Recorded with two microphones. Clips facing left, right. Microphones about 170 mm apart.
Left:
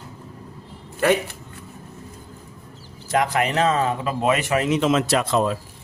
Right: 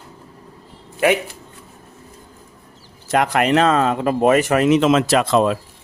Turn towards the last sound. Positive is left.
turn(degrees=-85)